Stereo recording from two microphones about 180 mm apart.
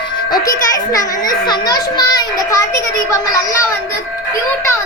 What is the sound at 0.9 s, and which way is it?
A child's voice, 20° left (ahead or behind).